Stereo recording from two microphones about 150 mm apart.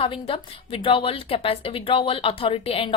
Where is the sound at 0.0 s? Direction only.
35° left (ahead or behind).